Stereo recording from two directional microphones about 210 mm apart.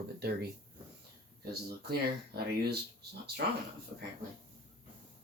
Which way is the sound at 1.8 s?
50° right (ahead or behind).